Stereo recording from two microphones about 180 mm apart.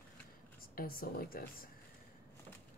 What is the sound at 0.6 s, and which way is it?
A woman's voice, 55° left (ahead or behind).